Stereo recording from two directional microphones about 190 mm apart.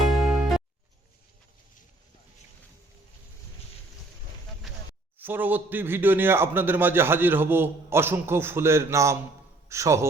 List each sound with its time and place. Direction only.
0.0 s music: centre (ahead or behind)
4.6 s a sound: centre (ahead or behind)
5.2 s a man's voice: 10° right (ahead or behind)